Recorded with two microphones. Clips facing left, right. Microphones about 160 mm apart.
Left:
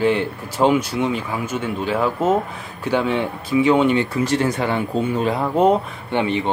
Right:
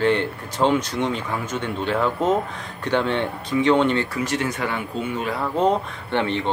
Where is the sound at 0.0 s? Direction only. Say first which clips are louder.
Left 2 dB; 5° left (ahead or behind).